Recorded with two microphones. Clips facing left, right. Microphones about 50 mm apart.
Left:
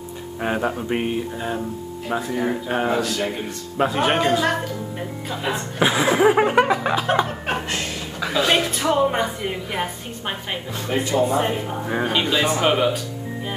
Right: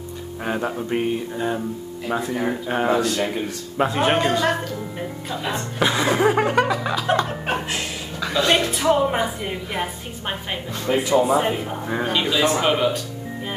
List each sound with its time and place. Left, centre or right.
0.4 s speech: centre
2.0 s a woman's voice: centre; by 7.1 s left
7.2 s chuckle: centre
8.2 s a woman's voice: centre